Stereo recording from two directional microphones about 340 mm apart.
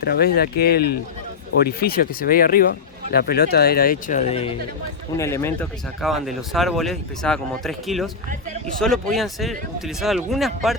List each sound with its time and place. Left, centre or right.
0.0 s speech: left; by 10.8 s centre